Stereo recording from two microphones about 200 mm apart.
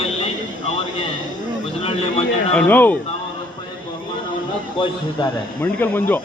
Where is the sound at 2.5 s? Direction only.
10° left (ahead or behind).